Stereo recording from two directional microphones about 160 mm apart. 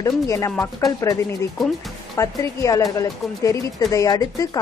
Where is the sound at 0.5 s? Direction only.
5° left (ahead or behind).